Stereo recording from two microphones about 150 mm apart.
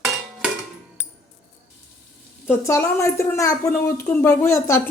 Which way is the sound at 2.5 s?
15° left (ahead or behind).